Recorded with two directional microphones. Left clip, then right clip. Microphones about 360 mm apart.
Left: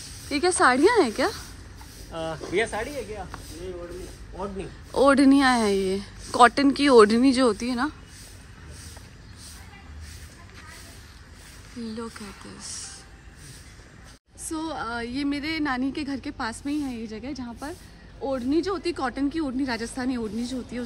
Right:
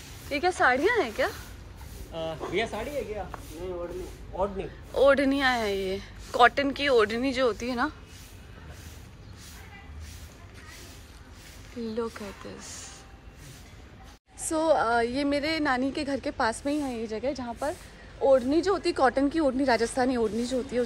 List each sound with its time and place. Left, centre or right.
0.3 s speech: centre
2.5 s speech: left
4.6 s speech: centre
11.8 s a woman's voice: centre
14.5 s a woman's voice: centre